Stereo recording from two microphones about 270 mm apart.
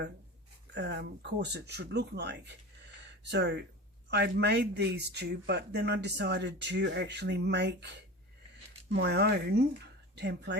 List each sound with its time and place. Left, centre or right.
0.7 s a man's voice: right
3.0 s a sound: right
4.1 s a man's voice: right